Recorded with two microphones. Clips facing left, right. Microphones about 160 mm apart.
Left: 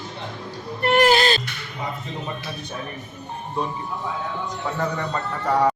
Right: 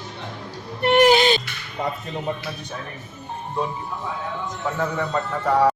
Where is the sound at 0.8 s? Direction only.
15° right (ahead or behind).